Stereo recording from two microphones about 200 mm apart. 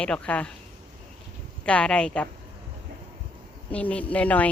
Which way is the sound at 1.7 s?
5° left (ahead or behind).